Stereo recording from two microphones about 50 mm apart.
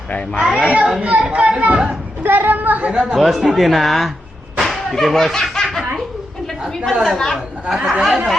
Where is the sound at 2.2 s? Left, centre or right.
Right.